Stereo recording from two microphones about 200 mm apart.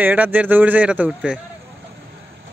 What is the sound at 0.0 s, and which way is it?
A man's voice, 10° right (ahead or behind).